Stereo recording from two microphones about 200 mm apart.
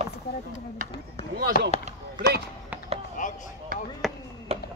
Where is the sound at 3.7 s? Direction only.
45° right (ahead or behind).